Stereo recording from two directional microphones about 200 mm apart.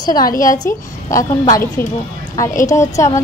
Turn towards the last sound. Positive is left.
turn(degrees=15)  # may be behind; listen again after turning